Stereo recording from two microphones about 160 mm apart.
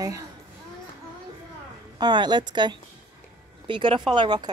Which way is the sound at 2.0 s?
25° right (ahead or behind).